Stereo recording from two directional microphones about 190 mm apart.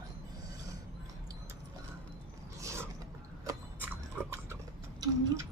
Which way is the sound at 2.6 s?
15° right (ahead or behind).